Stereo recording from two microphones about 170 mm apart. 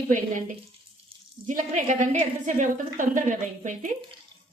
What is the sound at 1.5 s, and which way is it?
A woman's voice, 50° right (ahead or behind).